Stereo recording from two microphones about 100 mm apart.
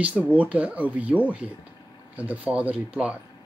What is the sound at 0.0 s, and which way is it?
Speech, 15° right (ahead or behind).